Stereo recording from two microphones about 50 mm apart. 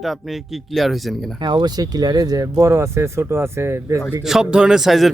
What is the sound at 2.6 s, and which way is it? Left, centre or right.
Speech, right.